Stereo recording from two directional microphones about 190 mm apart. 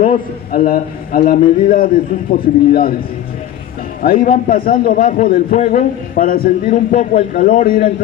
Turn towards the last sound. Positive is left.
turn(degrees=50)  # may be behind; listen again after turning